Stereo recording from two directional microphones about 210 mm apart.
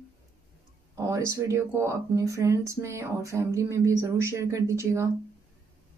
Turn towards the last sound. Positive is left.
turn(degrees=-15)  # may be behind; listen again after turning